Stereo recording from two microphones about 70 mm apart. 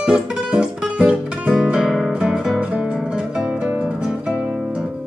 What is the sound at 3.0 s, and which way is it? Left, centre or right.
Music, centre.